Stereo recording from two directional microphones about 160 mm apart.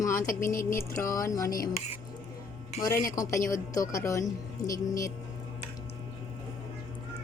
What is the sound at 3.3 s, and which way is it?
A woman's voice, 20° left (ahead or behind).